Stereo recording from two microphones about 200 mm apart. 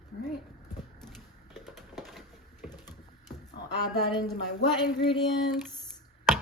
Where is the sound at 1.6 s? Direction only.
Centre (ahead or behind).